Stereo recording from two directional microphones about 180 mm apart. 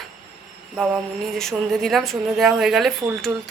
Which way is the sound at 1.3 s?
Centre (ahead or behind).